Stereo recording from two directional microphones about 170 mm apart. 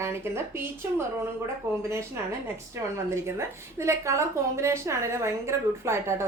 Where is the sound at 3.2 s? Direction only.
15° right (ahead or behind).